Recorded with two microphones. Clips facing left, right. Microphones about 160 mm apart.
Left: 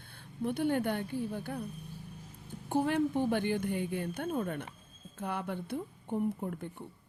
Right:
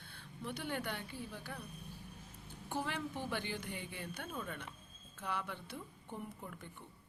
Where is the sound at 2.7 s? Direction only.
50° left (ahead or behind).